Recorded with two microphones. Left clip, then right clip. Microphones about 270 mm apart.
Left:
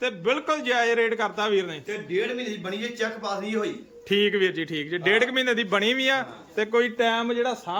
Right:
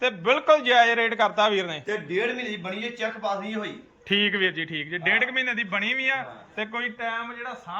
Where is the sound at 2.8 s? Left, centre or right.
Centre.